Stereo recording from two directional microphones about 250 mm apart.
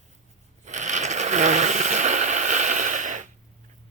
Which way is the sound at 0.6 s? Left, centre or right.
Right.